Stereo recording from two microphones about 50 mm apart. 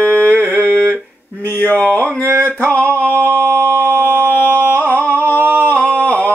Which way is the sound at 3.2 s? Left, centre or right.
Right.